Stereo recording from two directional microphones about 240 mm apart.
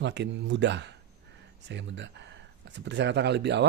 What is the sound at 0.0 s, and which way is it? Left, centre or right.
Speech, right.